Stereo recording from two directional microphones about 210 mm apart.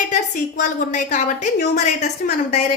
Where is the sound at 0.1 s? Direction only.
35° left (ahead or behind).